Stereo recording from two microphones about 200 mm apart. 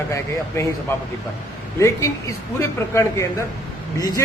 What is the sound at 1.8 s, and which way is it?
Speech, 15° left (ahead or behind).